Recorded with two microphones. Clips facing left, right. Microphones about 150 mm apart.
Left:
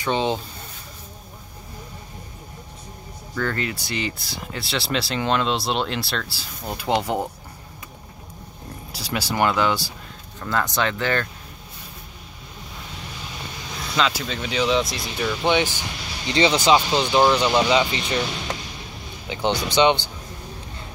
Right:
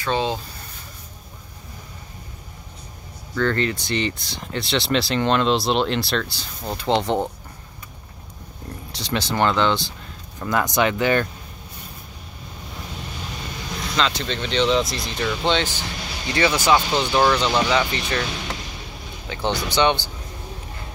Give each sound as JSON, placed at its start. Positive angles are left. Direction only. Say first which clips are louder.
{"t": 0.0, "sound": "speech", "louder": "left 1 dB", "side_deg": 20}
{"t": 3.3, "sound": "speech", "louder": "right 4 dB", "side_deg": 5}
{"t": 8.9, "sound": "speech", "louder": "right 1 dB", "side_deg": 5}
{"t": 10.4, "sound": "speech", "louder": "right 3 dB", "side_deg": -15}
{"t": 13.9, "sound": "speech", "louder": "even", "side_deg": 5}
{"t": 19.2, "sound": "speech", "louder": "left 1 dB", "side_deg": 15}